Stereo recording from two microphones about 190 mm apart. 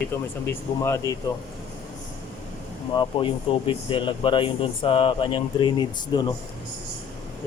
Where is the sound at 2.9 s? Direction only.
25° left (ahead or behind).